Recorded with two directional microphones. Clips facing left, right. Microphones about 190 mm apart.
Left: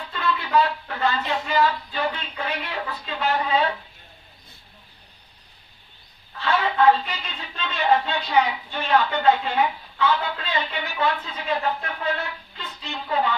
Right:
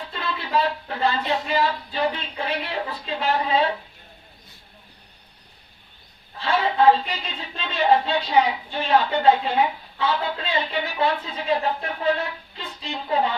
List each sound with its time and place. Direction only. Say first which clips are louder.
0.1 s speech: left 3 dB; 30° right (ahead or behind)
6.4 s speech: right 1 dB; 30° right (ahead or behind)
13.1 s speech: right 1 dB; 30° right (ahead or behind)